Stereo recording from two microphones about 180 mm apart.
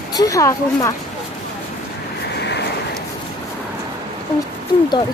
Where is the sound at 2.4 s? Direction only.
70° left (ahead or behind).